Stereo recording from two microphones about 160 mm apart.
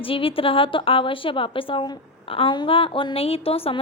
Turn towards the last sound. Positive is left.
turn(degrees=35)  # may be behind; listen again after turning